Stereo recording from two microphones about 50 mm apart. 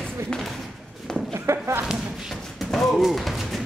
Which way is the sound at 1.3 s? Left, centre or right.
Right.